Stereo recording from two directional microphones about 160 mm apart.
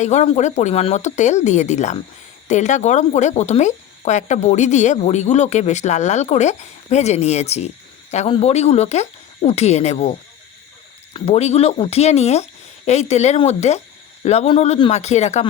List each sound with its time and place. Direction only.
0.0 s speech: 45° left (ahead or behind)